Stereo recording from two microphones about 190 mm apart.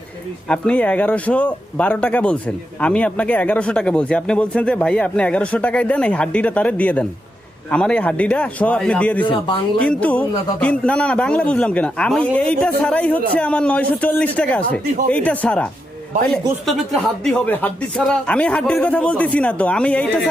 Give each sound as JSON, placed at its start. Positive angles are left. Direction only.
{"t": 0.4, "sound": "speech", "side_deg": 5}
{"t": 9.2, "sound": "speech", "side_deg": 25}
{"t": 9.8, "sound": "speech", "side_deg": 5}